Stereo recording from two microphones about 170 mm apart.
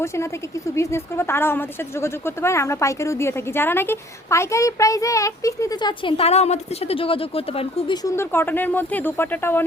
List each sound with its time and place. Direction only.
0.8 s a woman's voice: 15° left (ahead or behind); by 7.9 s 35° left (ahead or behind)
8.0 s a woman's voice: 15° left (ahead or behind)